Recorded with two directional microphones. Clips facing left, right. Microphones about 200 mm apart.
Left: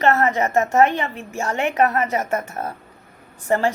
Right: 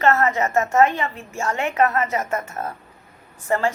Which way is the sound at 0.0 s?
20° left (ahead or behind).